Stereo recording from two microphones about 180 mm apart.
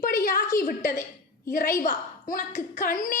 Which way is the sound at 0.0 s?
50° left (ahead or behind).